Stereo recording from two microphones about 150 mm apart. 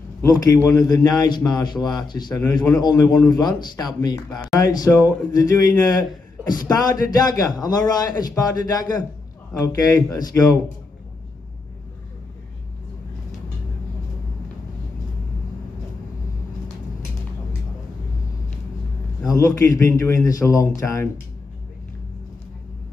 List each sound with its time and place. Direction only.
0.2 s a man's voice: 20° left (ahead or behind)
19.2 s a man's voice: 20° left (ahead or behind)